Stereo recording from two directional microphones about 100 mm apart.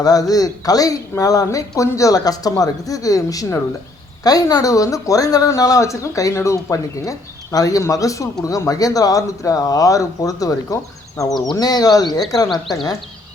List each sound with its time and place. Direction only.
0.0 s speech: 40° left (ahead or behind)